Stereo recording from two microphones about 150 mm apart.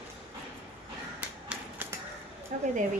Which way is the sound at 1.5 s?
5° right (ahead or behind).